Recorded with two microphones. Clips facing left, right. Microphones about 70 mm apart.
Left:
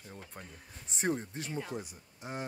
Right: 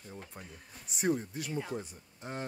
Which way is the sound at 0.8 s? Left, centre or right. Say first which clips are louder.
Right 2 dB; left.